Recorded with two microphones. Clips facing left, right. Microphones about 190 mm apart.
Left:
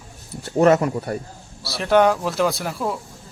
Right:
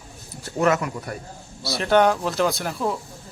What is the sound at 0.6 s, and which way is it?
Speech, 35° left (ahead or behind).